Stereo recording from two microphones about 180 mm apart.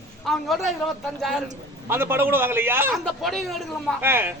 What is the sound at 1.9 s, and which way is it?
Speech, 10° right (ahead or behind).